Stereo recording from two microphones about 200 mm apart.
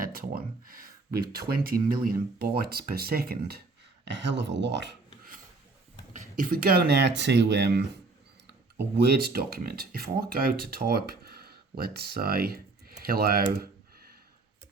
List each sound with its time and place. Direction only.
0.0 s speech: 45° right (ahead or behind)
4.0 s speech: 60° right (ahead or behind)
9.0 s speech: 50° right (ahead or behind)